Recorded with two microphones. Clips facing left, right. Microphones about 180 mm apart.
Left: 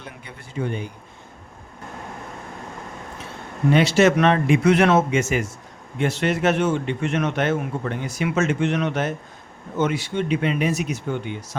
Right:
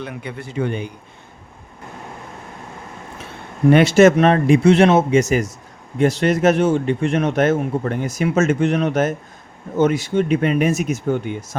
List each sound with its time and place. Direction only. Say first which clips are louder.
0.0 s a man's voice: right 10 dB; 70° right (ahead or behind)
3.7 s speech: right 6 dB; 55° right (ahead or behind)
4.2 s a man's voice: right 4 dB; 35° right (ahead or behind)